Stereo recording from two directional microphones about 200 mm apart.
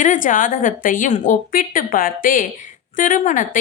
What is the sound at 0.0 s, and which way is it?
A woman's voice, 40° left (ahead or behind).